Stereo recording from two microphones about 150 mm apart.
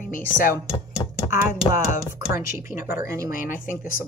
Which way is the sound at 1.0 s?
30° left (ahead or behind).